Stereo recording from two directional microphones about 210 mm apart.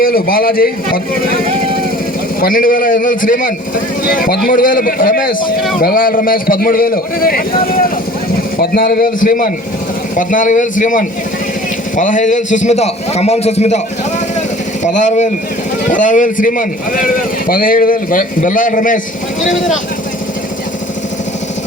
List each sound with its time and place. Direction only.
0.0 s a man's voice: 45° left (ahead or behind)
2.4 s a man's voice: 40° left (ahead or behind)
14.9 s a man's voice: 35° left (ahead or behind)